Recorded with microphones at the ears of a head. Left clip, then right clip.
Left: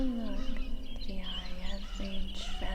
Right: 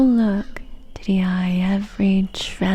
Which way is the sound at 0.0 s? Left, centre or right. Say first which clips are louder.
Right 19 dB; right.